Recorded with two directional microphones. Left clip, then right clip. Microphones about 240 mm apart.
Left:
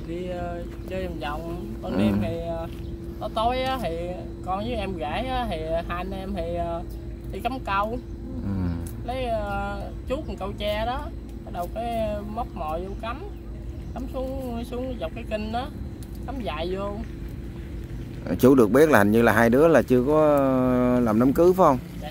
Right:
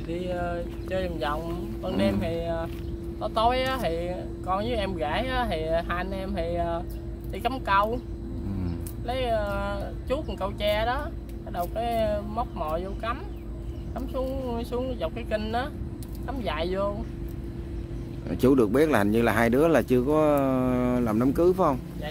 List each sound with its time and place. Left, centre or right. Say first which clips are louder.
0.3 s speech: right 2 dB; centre
9.0 s speech: right 1 dB; centre
18.3 s speech: left 4 dB; left